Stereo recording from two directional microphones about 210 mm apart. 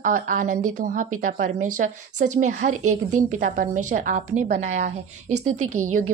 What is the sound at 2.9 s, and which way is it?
Speech, 35° right (ahead or behind).